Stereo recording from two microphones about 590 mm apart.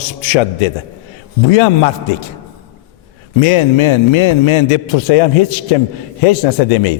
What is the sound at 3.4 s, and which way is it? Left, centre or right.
A man's voice, left.